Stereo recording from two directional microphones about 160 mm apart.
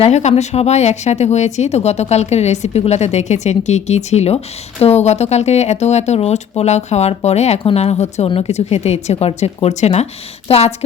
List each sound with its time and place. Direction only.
0.0 s speech: 45° left (ahead or behind)